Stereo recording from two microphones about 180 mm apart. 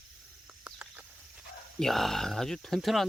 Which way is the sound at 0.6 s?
10° right (ahead or behind).